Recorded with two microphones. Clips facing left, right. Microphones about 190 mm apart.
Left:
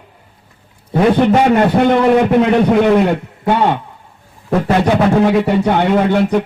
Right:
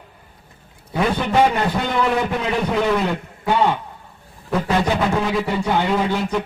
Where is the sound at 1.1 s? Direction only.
65° left (ahead or behind).